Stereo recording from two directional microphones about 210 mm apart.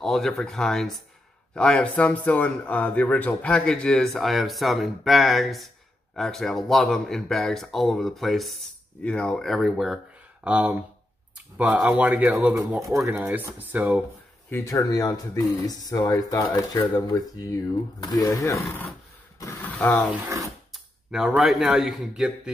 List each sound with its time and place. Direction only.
0.0 s speech: centre (ahead or behind)
14.5 s speech: 15° left (ahead or behind)
16.8 s speech: 10° left (ahead or behind)
19.4 s a sound: 10° left (ahead or behind)
20.1 s speech: 15° right (ahead or behind)
20.7 s a sound: centre (ahead or behind)
21.4 s speech: centre (ahead or behind)